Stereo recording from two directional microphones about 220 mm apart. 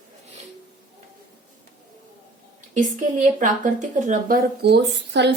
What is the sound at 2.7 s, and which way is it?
Speech, 35° right (ahead or behind).